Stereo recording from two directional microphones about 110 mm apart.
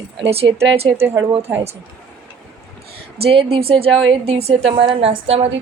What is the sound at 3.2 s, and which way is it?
A woman's voice, 55° right (ahead or behind).